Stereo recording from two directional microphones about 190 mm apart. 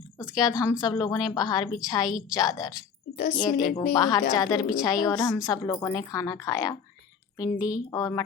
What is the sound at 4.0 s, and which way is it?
A woman's voice, 20° left (ahead or behind).